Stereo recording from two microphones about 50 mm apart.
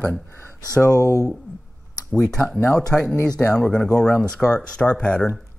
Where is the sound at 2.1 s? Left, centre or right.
Centre.